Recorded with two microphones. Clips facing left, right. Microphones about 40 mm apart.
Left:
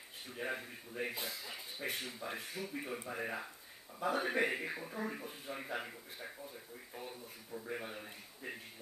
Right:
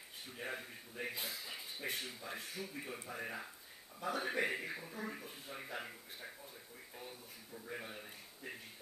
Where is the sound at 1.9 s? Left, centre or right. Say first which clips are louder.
Left 2 dB; centre.